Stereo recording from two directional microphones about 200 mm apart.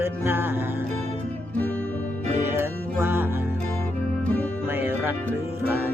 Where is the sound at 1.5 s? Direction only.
5° left (ahead or behind).